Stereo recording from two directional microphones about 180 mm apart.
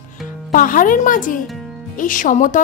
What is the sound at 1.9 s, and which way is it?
Speech, 45° left (ahead or behind).